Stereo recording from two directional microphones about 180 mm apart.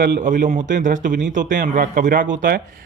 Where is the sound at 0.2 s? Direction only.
45° right (ahead or behind).